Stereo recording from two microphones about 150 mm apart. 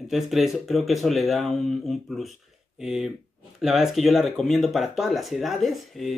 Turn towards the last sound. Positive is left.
turn(degrees=0)  # may be behind; listen again after turning